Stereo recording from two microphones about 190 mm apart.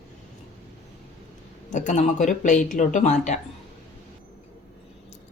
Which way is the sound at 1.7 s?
40° left (ahead or behind).